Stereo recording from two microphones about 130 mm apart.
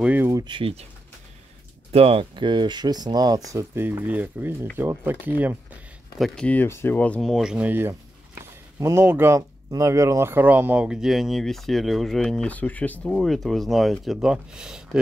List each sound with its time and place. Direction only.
0.0 s speech: 10° right (ahead or behind)
0.3 s a sound: 30° right (ahead or behind)
0.6 s speech: 45° right (ahead or behind)
1.9 s speech: 50° right (ahead or behind); by 3.4 s 30° right (ahead or behind)
3.5 s speech: 20° right (ahead or behind)
6.1 s speech: 5° left (ahead or behind)
7.2 s speech: centre (ahead or behind)